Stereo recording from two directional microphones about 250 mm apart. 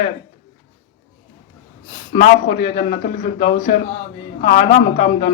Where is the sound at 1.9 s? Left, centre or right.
Left.